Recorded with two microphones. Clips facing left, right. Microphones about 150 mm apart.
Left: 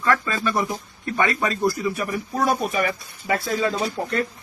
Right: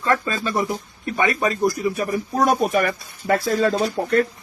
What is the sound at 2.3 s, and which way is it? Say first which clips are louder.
Speech: right 4 dB; 45° right (ahead or behind).